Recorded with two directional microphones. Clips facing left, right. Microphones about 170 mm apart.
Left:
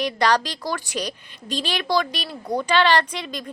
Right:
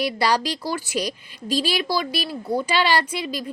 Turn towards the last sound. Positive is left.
turn(degrees=-10)  # may be behind; listen again after turning